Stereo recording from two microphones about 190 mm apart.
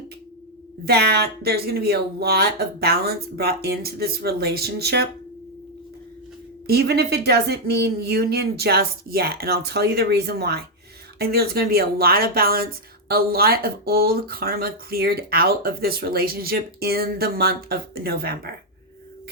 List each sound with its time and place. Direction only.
0.9 s speech: 60° right (ahead or behind)
6.7 s speech: 60° right (ahead or behind)